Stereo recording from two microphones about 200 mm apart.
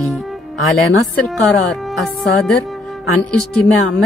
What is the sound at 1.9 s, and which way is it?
Speech, centre (ahead or behind).